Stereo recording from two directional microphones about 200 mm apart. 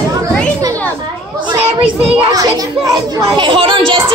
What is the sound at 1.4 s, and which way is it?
Speech, 25° right (ahead or behind).